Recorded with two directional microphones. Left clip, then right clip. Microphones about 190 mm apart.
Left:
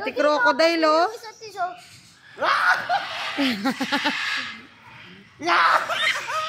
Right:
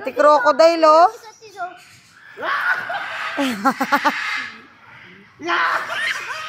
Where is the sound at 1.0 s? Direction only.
15° left (ahead or behind).